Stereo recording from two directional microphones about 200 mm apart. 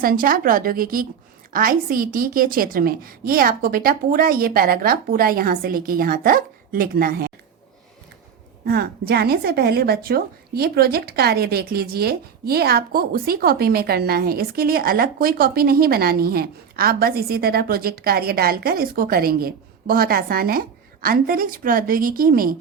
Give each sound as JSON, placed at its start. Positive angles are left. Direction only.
{"t": 0.0, "sound": "a woman's voice", "side_deg": -45}
{"t": 8.6, "sound": "a woman's voice", "side_deg": -50}